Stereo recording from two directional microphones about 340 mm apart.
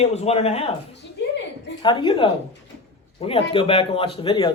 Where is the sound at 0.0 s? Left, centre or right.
Centre.